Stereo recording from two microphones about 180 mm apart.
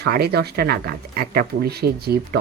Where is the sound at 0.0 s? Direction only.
60° right (ahead or behind).